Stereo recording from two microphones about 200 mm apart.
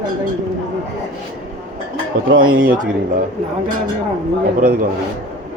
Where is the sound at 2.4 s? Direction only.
45° right (ahead or behind).